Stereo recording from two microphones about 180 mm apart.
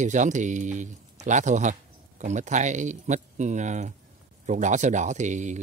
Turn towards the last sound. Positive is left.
turn(degrees=-40)  # may be behind; listen again after turning